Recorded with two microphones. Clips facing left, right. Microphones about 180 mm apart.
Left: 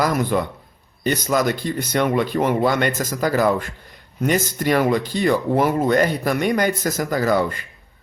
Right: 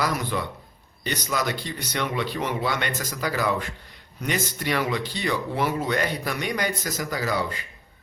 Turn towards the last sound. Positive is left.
turn(degrees=50)  # may be behind; listen again after turning